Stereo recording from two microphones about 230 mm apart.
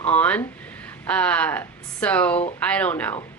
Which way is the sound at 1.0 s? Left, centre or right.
Centre.